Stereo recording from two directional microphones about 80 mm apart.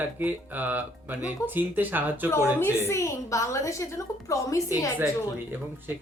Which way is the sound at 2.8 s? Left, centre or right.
Left.